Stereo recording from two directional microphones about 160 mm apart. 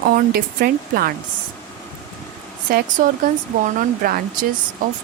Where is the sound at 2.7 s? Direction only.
65° right (ahead or behind).